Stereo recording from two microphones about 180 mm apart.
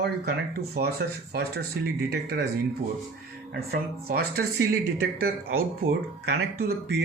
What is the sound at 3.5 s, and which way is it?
Speech, 60° right (ahead or behind).